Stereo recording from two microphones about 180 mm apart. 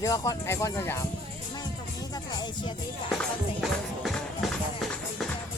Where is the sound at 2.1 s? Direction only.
20° left (ahead or behind).